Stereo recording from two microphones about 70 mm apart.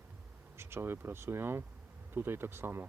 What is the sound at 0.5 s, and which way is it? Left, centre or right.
Speech, right.